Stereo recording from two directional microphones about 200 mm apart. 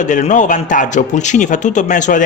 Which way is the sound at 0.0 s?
40° left (ahead or behind).